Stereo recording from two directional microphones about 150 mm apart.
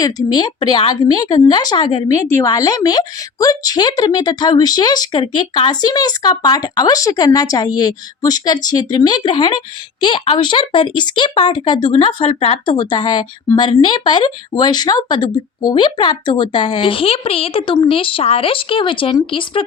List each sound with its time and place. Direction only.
0.0 s speech: 30° left (ahead or behind)